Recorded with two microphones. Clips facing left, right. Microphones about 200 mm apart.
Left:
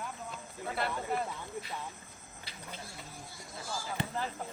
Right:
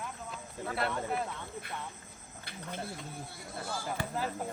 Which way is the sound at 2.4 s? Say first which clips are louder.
Right 6 dB; 55° right (ahead or behind).